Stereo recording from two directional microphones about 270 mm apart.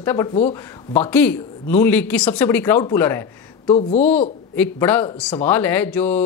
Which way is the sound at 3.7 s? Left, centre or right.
Left.